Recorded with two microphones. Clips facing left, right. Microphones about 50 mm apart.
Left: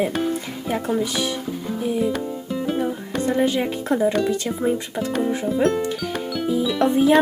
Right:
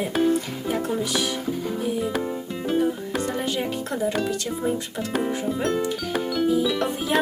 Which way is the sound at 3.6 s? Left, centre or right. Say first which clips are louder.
Left 5 dB; left.